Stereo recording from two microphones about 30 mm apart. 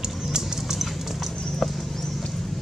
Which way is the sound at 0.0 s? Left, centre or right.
Right.